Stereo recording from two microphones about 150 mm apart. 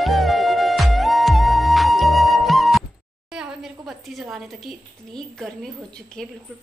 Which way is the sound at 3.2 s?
5° right (ahead or behind).